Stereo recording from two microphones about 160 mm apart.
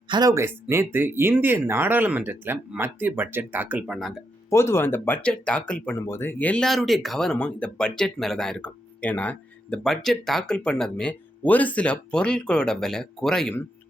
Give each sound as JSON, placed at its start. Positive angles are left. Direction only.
{"t": 0.1, "sound": "speech", "side_deg": -20}
{"t": 4.4, "sound": "speech", "side_deg": 15}